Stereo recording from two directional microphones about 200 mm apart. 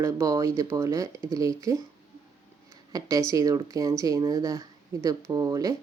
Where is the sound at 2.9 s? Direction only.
15° right (ahead or behind).